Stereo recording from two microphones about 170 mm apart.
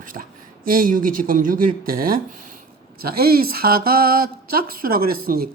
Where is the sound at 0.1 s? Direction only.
55° right (ahead or behind).